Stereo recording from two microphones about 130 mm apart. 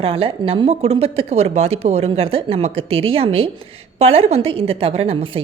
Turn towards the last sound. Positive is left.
turn(degrees=-45)  # may be behind; listen again after turning